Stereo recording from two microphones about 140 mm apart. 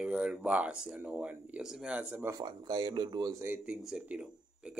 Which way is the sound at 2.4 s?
30° right (ahead or behind).